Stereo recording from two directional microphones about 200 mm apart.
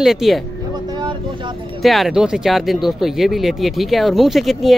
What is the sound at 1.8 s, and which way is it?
Speech, centre (ahead or behind).